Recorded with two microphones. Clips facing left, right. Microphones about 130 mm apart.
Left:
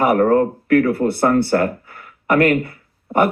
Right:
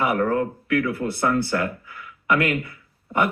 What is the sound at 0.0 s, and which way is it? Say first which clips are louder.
Speech: left 7 dB; 50° left (ahead or behind).